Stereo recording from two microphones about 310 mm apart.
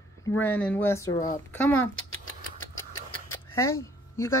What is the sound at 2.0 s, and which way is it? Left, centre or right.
Rodents, left.